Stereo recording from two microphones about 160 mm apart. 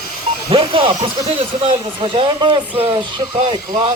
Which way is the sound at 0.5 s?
35° right (ahead or behind).